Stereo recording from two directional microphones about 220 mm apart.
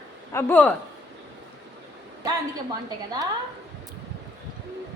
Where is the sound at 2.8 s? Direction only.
20° right (ahead or behind).